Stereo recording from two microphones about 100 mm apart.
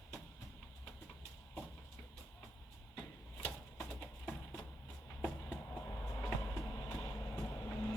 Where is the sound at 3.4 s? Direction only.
10° left (ahead or behind).